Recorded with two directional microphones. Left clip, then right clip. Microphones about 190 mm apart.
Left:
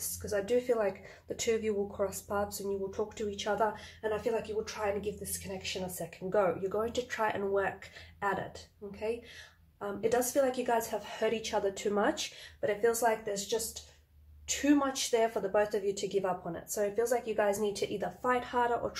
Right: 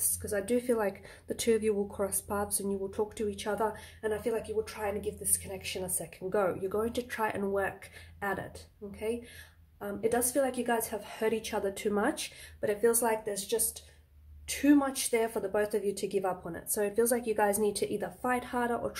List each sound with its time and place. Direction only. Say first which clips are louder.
0.2 s speech: left 1 dB; 35° right (ahead or behind)
9.8 s speech: even; 25° right (ahead or behind)
14.6 s speech: right 2 dB; 30° right (ahead or behind)